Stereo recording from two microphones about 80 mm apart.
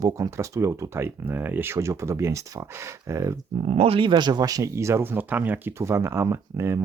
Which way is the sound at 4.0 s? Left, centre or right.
Right.